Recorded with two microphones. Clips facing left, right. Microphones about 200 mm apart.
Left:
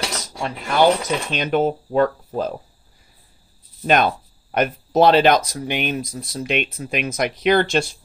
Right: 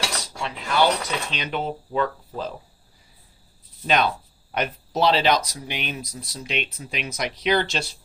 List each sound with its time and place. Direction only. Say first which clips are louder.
0.2 s speech: left 4 dB; 45° left (ahead or behind)
3.8 s speech: left 4 dB; 50° left (ahead or behind)